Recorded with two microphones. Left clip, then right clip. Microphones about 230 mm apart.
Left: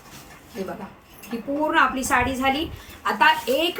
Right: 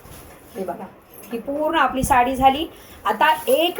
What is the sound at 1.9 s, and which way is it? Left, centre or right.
A woman's voice, centre.